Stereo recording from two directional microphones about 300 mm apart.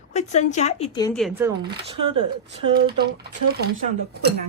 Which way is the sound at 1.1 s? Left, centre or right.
Centre.